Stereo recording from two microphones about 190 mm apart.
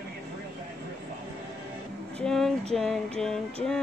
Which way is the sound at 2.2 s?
5° left (ahead or behind).